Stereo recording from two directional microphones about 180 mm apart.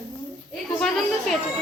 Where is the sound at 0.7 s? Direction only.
Centre (ahead or behind).